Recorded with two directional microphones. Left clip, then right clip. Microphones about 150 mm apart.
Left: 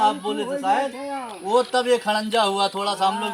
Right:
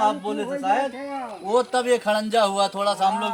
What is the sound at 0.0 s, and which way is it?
Speech, 5° right (ahead or behind).